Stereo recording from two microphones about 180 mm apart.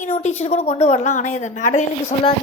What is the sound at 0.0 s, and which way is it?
A woman's voice, 40° left (ahead or behind).